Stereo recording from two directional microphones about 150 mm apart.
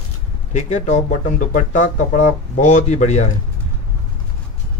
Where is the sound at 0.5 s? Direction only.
50° left (ahead or behind).